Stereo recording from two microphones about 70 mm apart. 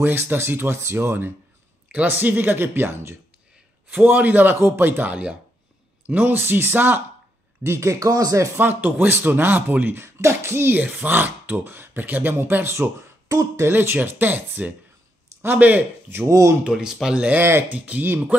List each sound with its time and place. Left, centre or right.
0.0 s speech: right
3.9 s speech: right
5.1 s speech: centre
6.0 s speech: right
7.6 s speech: right
8.5 s speech: right
10.0 s a sound: right
10.8 s speech: right
13.7 s speech: right
16.3 s speech: right
16.6 s speech: centre
17.3 s speech: right
17.7 s speech: centre
18.0 s speech: right